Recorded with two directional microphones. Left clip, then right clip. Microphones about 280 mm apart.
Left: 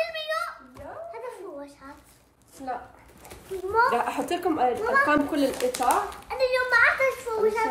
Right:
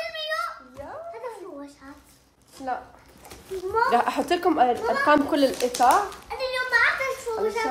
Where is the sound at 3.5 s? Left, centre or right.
Centre.